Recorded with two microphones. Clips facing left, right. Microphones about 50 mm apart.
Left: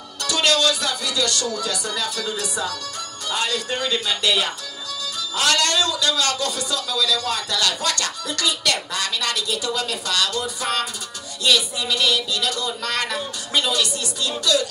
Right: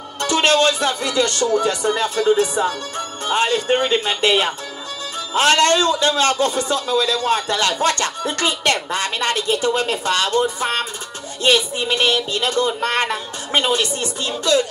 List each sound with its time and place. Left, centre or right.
0.2 s a man's voice: right